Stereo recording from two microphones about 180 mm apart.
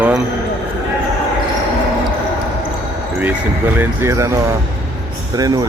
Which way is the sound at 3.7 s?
10° right (ahead or behind).